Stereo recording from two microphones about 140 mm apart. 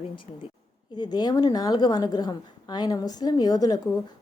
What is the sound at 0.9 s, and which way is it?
A woman's voice, 30° left (ahead or behind).